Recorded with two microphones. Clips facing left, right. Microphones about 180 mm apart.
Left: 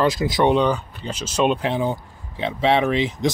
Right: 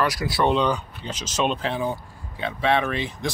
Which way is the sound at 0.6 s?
5° left (ahead or behind).